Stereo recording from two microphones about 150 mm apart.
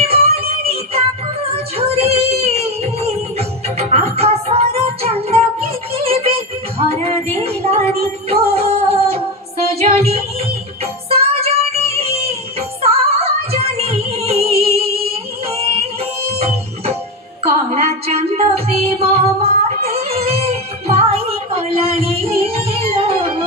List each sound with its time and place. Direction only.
0.0 s music: 40° right (ahead or behind)
1.7 s music: 45° right (ahead or behind)